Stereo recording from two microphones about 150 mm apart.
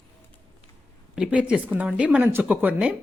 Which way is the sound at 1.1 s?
5° right (ahead or behind).